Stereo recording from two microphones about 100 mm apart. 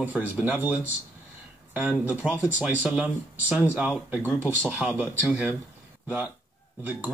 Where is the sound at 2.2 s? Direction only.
15° right (ahead or behind).